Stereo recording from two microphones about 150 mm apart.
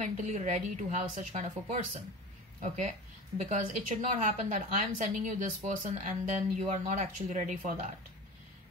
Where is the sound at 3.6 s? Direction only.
60° right (ahead or behind).